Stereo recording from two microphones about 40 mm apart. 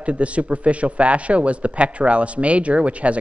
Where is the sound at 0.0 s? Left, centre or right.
Right.